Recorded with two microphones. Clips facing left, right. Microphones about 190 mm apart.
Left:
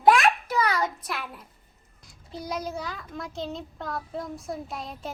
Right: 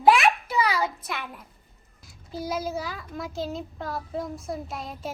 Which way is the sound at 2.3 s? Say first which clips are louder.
Right 3 dB; 5° right (ahead or behind).